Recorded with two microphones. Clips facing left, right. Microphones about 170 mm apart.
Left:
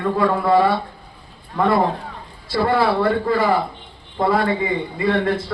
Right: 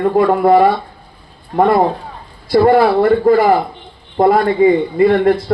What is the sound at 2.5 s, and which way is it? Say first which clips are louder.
A man's voice: right 8 dB; 60° right (ahead or behind).